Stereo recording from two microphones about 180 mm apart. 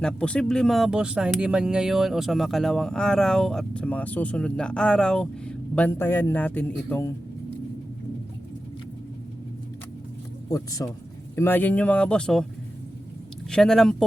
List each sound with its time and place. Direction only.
0.0 s speech: 5° left (ahead or behind)
10.5 s speech: 20° left (ahead or behind); by 12.5 s 5° left (ahead or behind)
13.5 s speech: 5° left (ahead or behind)